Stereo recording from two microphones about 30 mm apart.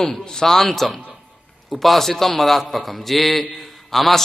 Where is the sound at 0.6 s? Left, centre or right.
Centre.